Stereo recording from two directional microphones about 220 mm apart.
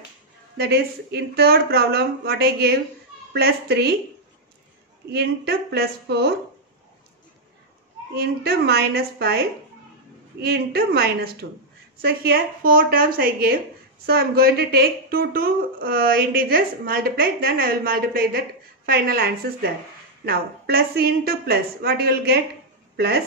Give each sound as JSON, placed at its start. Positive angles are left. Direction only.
{"t": 0.6, "sound": "a woman's voice", "side_deg": -45}
{"t": 5.1, "sound": "a woman's voice", "side_deg": -45}
{"t": 8.2, "sound": "a woman's voice", "side_deg": -45}
{"t": 10.4, "sound": "a woman's voice", "side_deg": -45}